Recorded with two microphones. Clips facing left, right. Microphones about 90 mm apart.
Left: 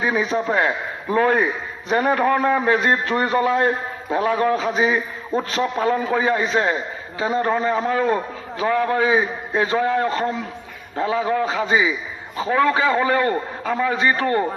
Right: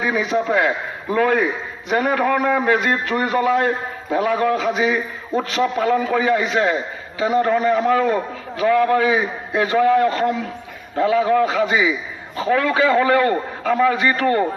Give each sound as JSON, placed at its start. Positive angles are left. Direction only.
{"t": 0.0, "sound": "a man's voice", "side_deg": 35}